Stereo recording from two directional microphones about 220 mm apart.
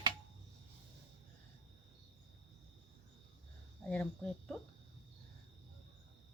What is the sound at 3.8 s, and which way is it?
Speech, 5° left (ahead or behind).